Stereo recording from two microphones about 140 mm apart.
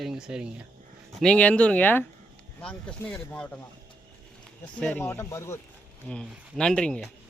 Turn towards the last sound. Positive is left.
turn(degrees=5)  # may be behind; listen again after turning